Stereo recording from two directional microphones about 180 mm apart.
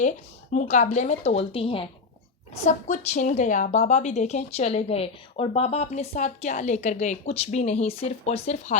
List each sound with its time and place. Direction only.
0.5 s speech: 40° left (ahead or behind)
2.6 s speech: 40° left (ahead or behind)